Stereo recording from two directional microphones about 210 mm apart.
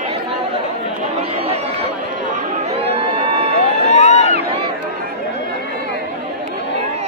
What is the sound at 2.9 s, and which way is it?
Crowd, 30° right (ahead or behind).